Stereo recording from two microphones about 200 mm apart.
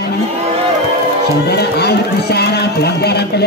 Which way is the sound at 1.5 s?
55° left (ahead or behind).